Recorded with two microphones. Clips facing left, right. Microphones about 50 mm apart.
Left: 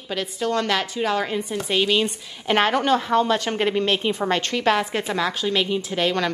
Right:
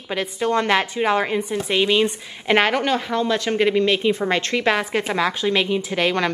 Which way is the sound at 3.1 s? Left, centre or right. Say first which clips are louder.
Left 1 dB; left.